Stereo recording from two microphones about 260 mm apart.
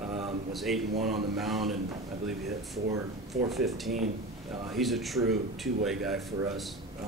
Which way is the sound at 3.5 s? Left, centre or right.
Centre.